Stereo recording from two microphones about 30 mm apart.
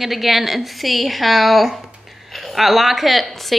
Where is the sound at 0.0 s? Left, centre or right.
Centre.